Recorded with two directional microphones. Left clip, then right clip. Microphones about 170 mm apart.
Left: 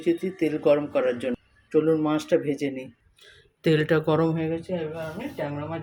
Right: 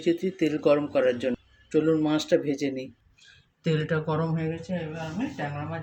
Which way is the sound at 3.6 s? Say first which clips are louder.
Left 6 dB; 55° left (ahead or behind).